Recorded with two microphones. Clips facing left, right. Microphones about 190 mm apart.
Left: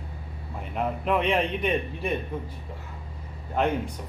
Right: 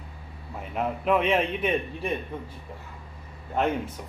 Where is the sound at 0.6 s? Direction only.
Centre (ahead or behind).